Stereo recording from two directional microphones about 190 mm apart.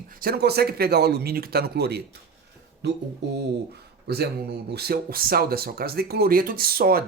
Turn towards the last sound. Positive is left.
turn(degrees=-50)  # may be behind; listen again after turning